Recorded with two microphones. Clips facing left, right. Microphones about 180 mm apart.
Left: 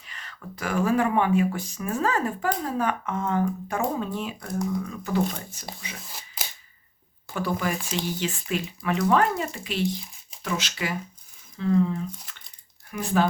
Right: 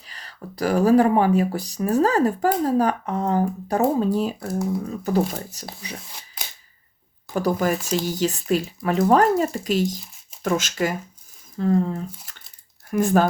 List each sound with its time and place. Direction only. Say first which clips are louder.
0.1 s speech: right 3 dB; 35° right (ahead or behind)
4.4 s speech: right 3 dB; 5° right (ahead or behind)
4.7 s speech: right 4 dB; 35° right (ahead or behind)
6.0 s shuffling cards: even; 5° left (ahead or behind)
7.3 s speech: right 6 dB; 40° right (ahead or behind)